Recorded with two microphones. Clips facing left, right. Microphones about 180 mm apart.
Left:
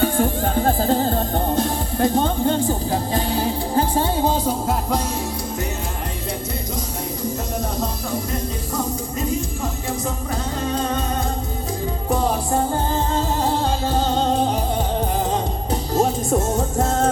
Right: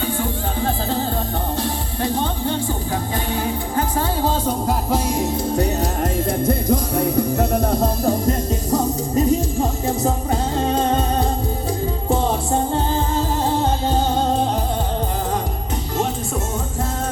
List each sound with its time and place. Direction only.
0.0 s music: 50° left (ahead or behind)
6.4 s music: 55° right (ahead or behind)
8.7 s music: 35° right (ahead or behind)
16.0 s music: 40° left (ahead or behind)